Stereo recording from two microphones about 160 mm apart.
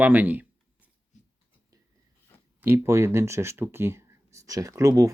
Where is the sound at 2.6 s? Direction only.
15° right (ahead or behind).